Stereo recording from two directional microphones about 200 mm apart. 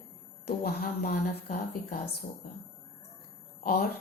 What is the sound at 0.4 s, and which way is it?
A woman's voice, 50° left (ahead or behind).